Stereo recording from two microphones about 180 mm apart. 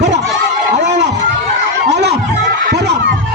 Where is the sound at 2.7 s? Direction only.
70° right (ahead or behind).